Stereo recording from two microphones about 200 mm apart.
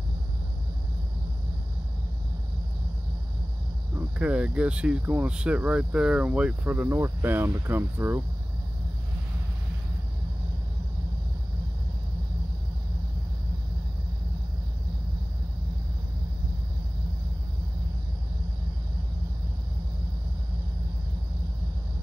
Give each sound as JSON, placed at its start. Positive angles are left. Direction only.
{"t": 4.2, "sound": "speech", "side_deg": -5}